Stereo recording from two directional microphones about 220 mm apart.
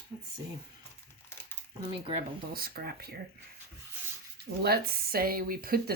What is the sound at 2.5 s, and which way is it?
Speech, 45° right (ahead or behind).